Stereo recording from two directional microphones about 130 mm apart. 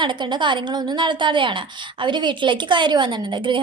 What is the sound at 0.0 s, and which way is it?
A woman's voice, 35° right (ahead or behind).